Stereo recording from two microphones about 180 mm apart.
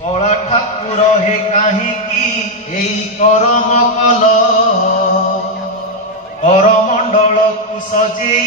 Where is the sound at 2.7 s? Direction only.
45° left (ahead or behind).